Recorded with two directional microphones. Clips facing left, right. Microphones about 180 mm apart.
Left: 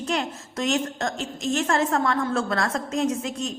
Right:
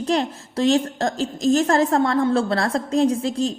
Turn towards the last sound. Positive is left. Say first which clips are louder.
# right 6 dB
turn(degrees=-35)  # may be behind; listen again after turning